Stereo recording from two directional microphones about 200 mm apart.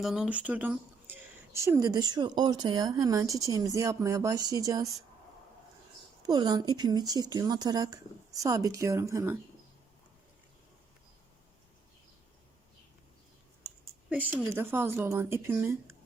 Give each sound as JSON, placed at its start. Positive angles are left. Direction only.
{"t": 0.0, "sound": "speech", "side_deg": -5}
{"t": 6.2, "sound": "speech", "side_deg": -20}
{"t": 14.3, "sound": "speech", "side_deg": -10}